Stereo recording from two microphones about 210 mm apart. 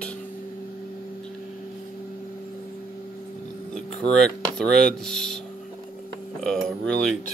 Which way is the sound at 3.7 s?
Centre (ahead or behind).